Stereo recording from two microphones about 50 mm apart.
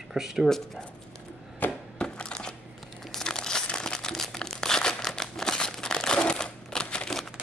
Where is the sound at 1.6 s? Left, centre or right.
Left.